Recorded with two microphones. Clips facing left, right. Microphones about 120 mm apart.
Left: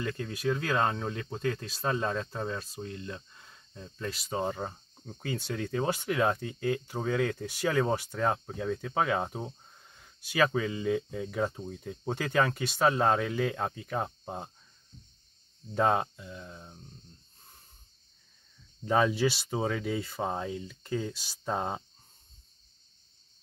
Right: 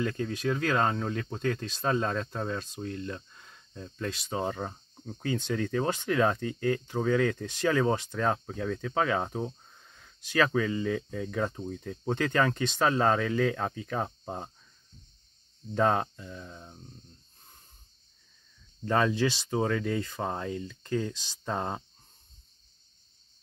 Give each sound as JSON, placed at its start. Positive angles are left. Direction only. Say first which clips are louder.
{"t": 0.0, "sound": "speech", "louder": "right 2 dB", "side_deg": 5}
{"t": 15.7, "sound": "speech", "louder": "right 1 dB", "side_deg": 5}
{"t": 18.9, "sound": "speech", "louder": "even", "side_deg": 10}